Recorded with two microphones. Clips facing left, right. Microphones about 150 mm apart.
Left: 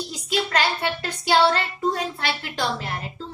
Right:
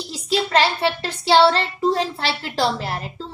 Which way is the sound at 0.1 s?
30° right (ahead or behind).